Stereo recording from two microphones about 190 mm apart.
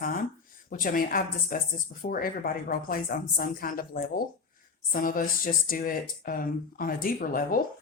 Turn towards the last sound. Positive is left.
turn(degrees=50)  # may be behind; listen again after turning